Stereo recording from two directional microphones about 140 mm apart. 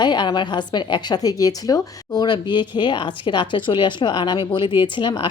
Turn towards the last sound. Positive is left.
turn(degrees=35)  # may be behind; listen again after turning